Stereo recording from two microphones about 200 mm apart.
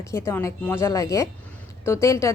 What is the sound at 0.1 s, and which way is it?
Speech, 15° left (ahead or behind).